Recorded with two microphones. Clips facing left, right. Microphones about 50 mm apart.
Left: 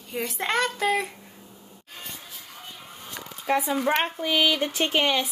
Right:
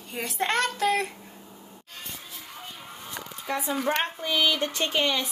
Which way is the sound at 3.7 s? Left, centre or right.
Centre.